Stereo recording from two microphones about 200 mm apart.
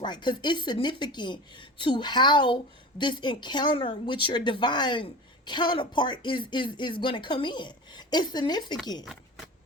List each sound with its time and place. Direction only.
0.0 s speech: 20° left (ahead or behind)